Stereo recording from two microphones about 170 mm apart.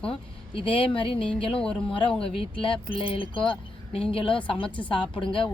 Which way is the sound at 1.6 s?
5° left (ahead or behind).